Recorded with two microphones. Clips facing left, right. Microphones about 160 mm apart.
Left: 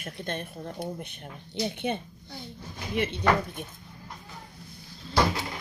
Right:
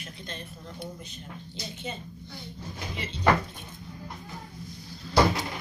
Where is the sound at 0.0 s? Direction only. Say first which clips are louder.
Left 6 dB; 55° left (ahead or behind).